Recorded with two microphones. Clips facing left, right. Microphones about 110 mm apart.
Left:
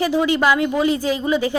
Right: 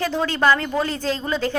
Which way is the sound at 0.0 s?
15° left (ahead or behind).